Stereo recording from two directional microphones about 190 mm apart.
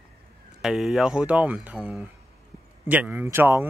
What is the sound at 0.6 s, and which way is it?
Speech, 5° right (ahead or behind).